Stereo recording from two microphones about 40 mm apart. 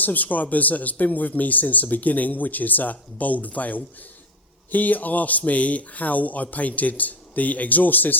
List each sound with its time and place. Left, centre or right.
0.0 s speech: left